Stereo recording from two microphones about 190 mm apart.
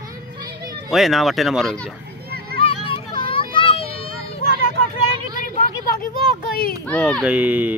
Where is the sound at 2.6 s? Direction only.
25° left (ahead or behind).